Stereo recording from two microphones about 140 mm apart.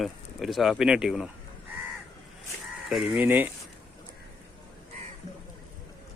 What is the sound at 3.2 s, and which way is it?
Speech, 10° right (ahead or behind).